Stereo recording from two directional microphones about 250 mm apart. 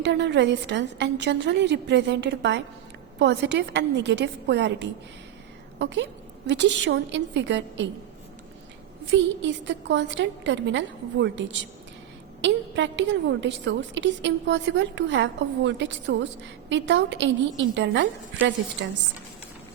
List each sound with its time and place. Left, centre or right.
0.0 s a woman's voice: right
9.0 s a woman's voice: right